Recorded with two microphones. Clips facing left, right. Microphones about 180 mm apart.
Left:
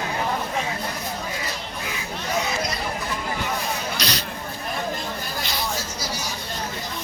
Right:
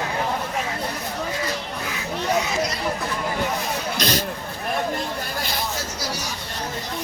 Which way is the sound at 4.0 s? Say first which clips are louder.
Right 5 dB; 50° right (ahead or behind).